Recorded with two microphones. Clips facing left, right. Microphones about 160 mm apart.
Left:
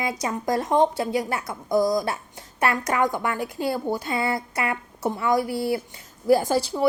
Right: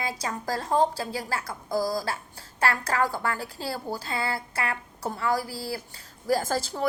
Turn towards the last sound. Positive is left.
turn(degrees=15)  # may be behind; listen again after turning